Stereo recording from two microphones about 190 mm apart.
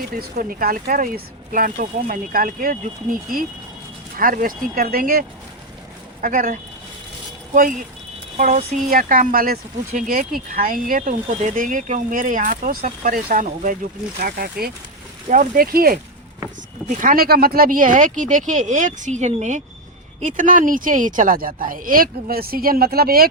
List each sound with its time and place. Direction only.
0.2 s speech: 50° right (ahead or behind)
4.2 s speech: 45° right (ahead or behind)
6.2 s speech: 45° right (ahead or behind)
17.0 s speech: 50° right (ahead or behind)